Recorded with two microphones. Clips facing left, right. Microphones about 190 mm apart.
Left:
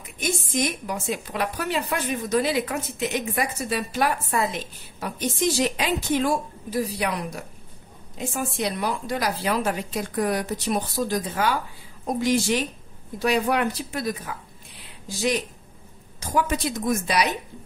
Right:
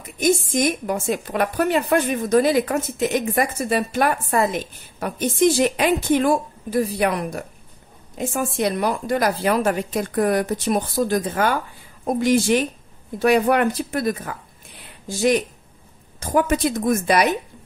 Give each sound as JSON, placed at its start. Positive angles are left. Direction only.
{"t": 0.2, "sound": "a woman's voice", "side_deg": -45}